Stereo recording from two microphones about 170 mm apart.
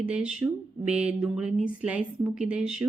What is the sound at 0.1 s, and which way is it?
A woman's voice, 5° right (ahead or behind).